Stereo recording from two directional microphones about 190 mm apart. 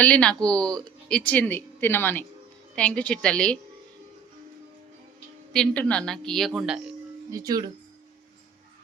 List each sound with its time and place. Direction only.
0.0 s a woman's voice: 5° left (ahead or behind)
5.5 s a woman's voice: 5° left (ahead or behind)
7.3 s speech: 20° right (ahead or behind)